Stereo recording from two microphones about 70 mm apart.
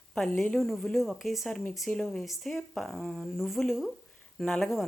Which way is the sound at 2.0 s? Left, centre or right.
Centre.